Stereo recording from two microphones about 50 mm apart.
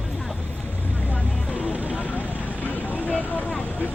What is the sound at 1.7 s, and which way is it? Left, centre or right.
Vehicle, right.